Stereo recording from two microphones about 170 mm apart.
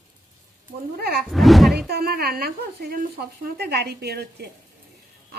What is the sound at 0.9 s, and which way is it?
Speech, 65° right (ahead or behind).